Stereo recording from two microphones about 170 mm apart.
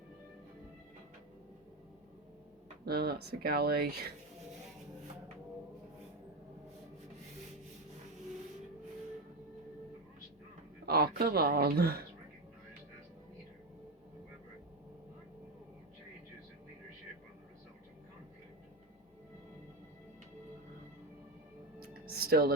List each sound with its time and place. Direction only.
2.8 s speech: 65° right (ahead or behind)
10.8 s speech: 65° right (ahead or behind)
22.0 s music: 65° right (ahead or behind)